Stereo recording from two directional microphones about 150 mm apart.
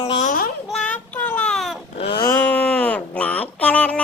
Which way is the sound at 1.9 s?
40° left (ahead or behind).